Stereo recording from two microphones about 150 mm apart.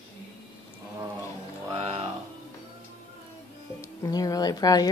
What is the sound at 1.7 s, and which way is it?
Music, 40° right (ahead or behind).